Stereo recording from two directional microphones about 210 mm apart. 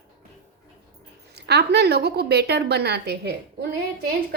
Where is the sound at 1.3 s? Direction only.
50° right (ahead or behind).